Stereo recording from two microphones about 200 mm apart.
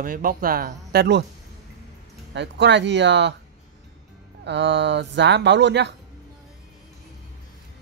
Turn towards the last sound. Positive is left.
turn(degrees=-60)  # may be behind; listen again after turning